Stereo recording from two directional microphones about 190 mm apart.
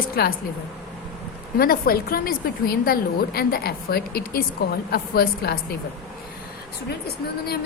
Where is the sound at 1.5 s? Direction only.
50° left (ahead or behind).